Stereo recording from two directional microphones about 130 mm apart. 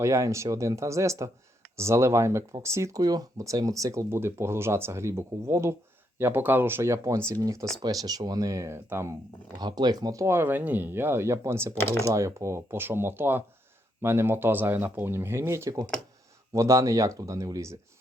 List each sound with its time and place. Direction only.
0.0 s speech: 20° right (ahead or behind)
9.6 s speech: 30° right (ahead or behind)
11.8 s speech: 20° left (ahead or behind)
12.0 s speech: 25° right (ahead or behind)